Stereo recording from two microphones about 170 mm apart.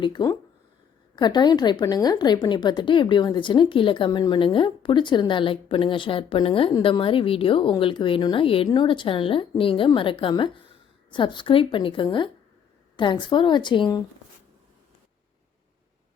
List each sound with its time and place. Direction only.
0.0 s a woman's voice: 25° left (ahead or behind)